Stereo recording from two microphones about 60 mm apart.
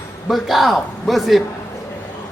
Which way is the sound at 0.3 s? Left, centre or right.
Centre.